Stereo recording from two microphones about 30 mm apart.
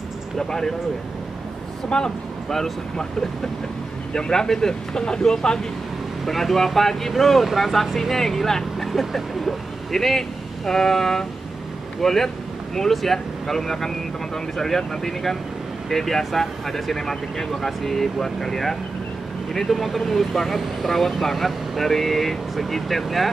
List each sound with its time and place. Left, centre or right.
0.4 s speech: centre
1.9 s speech: left
2.5 s speech: centre
6.2 s speech: centre